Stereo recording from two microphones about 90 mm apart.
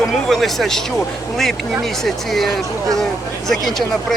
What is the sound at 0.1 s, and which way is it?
Speech, centre (ahead or behind).